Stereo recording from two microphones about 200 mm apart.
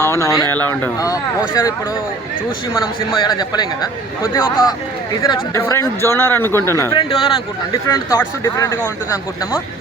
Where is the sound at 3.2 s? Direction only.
20° left (ahead or behind).